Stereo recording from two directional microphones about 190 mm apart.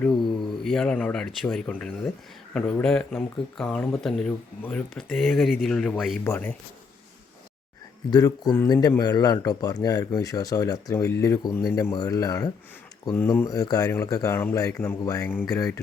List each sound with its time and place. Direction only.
0.6 s speech: 5° left (ahead or behind)
8.1 s speech: 20° left (ahead or behind)